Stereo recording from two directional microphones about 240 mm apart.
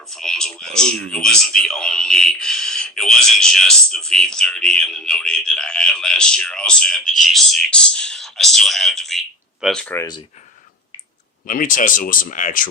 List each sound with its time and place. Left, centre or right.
0.1 s a man's voice: centre
11.4 s speech: left